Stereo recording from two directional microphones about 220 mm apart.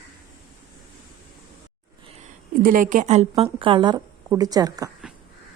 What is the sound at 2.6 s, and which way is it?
A woman's voice, 40° right (ahead or behind).